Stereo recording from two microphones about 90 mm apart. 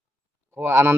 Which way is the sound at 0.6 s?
25° right (ahead or behind).